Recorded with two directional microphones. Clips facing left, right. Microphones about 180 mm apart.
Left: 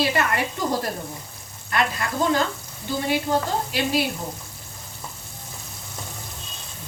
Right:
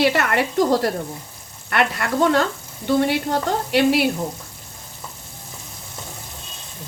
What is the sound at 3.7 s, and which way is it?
Speech, 65° right (ahead or behind).